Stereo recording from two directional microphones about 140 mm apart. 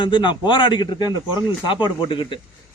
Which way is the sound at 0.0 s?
35° left (ahead or behind).